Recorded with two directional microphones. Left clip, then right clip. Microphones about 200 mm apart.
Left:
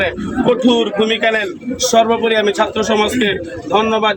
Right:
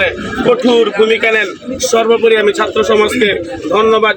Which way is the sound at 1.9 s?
20° left (ahead or behind).